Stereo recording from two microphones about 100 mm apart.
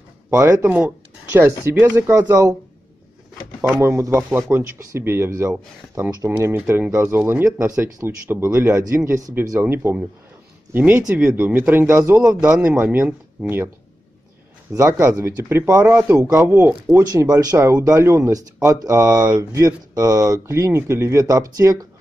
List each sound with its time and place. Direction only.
0.3 s speech: 25° right (ahead or behind)
3.6 s speech: 25° right (ahead or behind)
14.7 s speech: 30° right (ahead or behind)
16.4 s speech: 20° right (ahead or behind)
17.2 s speech: 40° right (ahead or behind)